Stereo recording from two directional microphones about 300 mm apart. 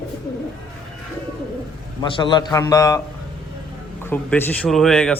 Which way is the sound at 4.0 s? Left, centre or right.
Centre.